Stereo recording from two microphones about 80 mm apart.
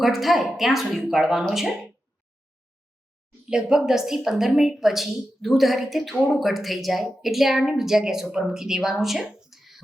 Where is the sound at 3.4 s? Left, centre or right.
Centre.